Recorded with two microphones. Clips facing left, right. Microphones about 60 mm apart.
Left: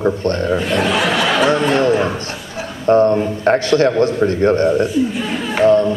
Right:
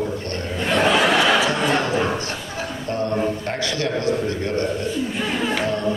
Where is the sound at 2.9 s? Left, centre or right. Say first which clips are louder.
Left 11 dB; left.